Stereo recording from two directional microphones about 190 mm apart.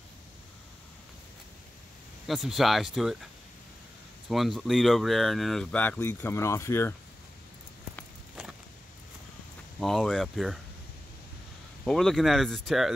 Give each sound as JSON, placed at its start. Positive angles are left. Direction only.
{"t": 2.2, "sound": "speech", "side_deg": 0}
{"t": 4.3, "sound": "speech", "side_deg": 0}
{"t": 9.8, "sound": "speech", "side_deg": 0}
{"t": 11.8, "sound": "speech", "side_deg": 0}